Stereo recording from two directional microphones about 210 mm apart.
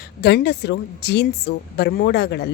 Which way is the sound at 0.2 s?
55° left (ahead or behind).